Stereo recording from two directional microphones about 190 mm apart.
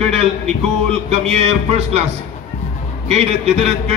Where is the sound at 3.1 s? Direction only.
35° right (ahead or behind).